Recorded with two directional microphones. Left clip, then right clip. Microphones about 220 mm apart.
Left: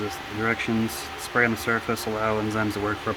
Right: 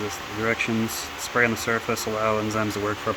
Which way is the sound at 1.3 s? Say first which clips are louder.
Even; 15° right (ahead or behind).